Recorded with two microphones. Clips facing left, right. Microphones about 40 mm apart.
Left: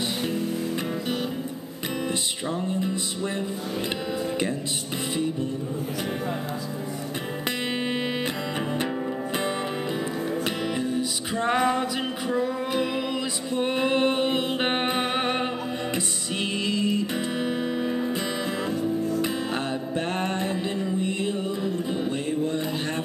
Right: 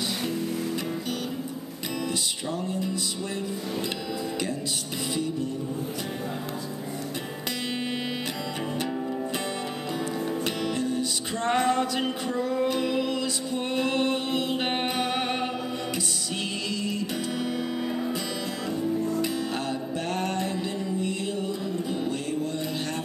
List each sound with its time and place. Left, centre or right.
2.7 s music: left
10.4 s music: centre
16.6 s music: left
20.1 s music: left